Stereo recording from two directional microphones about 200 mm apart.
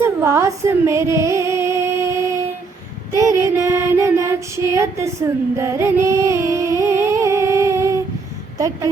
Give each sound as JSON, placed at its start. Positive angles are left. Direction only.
{"t": 0.0, "sound": "a sound", "side_deg": -15}
{"t": 3.2, "sound": "female singing", "side_deg": -15}
{"t": 5.5, "sound": "music", "side_deg": -15}
{"t": 8.5, "sound": "a woman's voice", "side_deg": -15}